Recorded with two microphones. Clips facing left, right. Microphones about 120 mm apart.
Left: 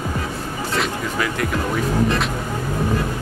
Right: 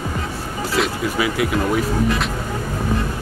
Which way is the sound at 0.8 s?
10° right (ahead or behind).